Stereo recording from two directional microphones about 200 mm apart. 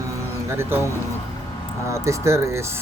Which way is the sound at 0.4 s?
15° right (ahead or behind).